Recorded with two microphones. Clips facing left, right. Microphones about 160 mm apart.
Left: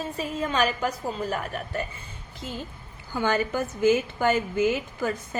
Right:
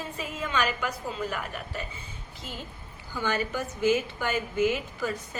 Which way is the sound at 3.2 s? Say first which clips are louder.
Left 4 dB; 45° left (ahead or behind).